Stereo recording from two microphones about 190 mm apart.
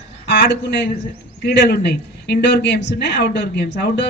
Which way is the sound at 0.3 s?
65° left (ahead or behind).